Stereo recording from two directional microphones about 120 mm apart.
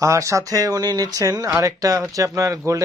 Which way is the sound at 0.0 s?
25° right (ahead or behind).